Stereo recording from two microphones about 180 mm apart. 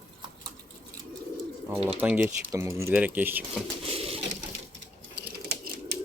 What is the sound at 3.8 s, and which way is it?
Pigeon, 35° right (ahead or behind).